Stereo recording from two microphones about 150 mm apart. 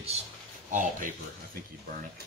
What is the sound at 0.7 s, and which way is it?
Speech, 60° right (ahead or behind).